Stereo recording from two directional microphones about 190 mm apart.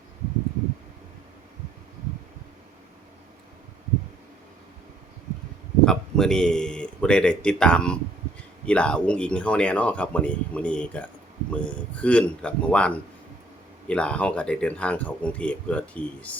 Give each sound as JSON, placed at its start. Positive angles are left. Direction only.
{"t": 5.8, "sound": "speech", "side_deg": 5}